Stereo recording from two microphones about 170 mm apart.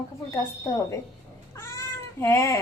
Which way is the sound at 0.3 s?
20° left (ahead or behind).